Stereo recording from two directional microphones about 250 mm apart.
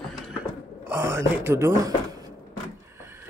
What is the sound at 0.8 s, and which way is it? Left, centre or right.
Speech, centre.